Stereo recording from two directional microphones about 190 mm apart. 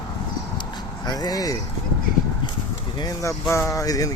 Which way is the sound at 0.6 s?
20° left (ahead or behind).